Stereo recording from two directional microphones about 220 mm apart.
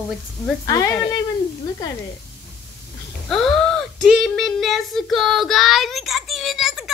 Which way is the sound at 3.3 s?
Centre (ahead or behind).